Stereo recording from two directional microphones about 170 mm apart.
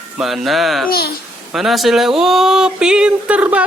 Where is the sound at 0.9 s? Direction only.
65° left (ahead or behind).